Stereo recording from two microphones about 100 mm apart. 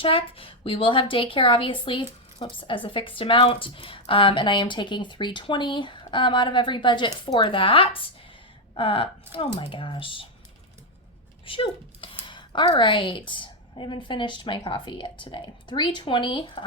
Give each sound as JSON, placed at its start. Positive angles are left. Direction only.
{"t": 0.0, "sound": "a woman's voice", "side_deg": 65}
{"t": 11.4, "sound": "a sound", "side_deg": 60}
{"t": 12.2, "sound": "a woman's voice", "side_deg": 50}